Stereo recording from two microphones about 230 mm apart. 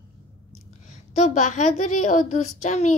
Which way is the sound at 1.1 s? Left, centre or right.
Left.